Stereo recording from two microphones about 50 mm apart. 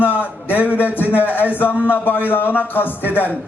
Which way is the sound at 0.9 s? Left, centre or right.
Left.